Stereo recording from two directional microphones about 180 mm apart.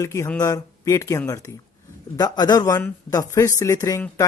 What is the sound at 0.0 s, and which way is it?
Speech, 15° left (ahead or behind).